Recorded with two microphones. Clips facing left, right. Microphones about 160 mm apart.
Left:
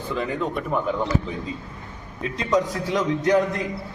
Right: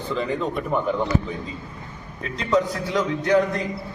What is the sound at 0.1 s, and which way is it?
Speech, 5° left (ahead or behind).